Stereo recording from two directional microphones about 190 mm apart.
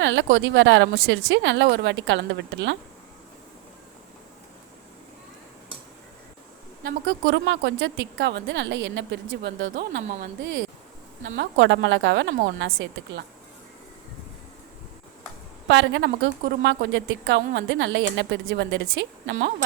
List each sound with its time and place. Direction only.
0.0 s speech: 70° right (ahead or behind)
6.8 s speech: 70° right (ahead or behind)
15.6 s speech: 75° right (ahead or behind)